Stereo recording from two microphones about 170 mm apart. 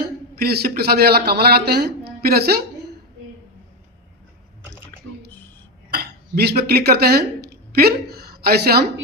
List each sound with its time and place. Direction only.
0.0 s a man's voice: 65° right (ahead or behind)
5.9 s speech: 70° right (ahead or behind)